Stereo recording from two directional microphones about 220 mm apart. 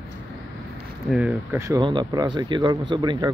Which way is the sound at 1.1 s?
5° right (ahead or behind).